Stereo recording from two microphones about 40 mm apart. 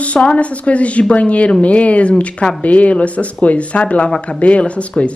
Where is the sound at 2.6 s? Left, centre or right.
Left.